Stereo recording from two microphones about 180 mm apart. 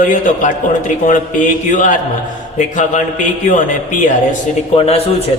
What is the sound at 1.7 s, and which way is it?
Speech, 45° left (ahead or behind).